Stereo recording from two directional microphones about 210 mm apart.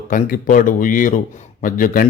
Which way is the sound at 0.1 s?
40° left (ahead or behind).